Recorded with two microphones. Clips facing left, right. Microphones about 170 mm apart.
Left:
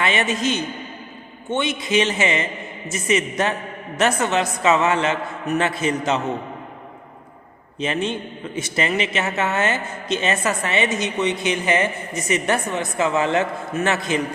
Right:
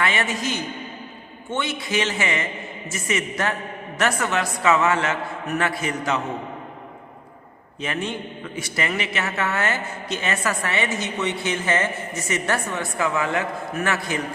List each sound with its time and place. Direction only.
0.0 s a man's voice: 20° left (ahead or behind)
7.8 s a man's voice: 20° left (ahead or behind)